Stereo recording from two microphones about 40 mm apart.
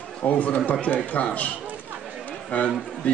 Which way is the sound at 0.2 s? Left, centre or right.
Left.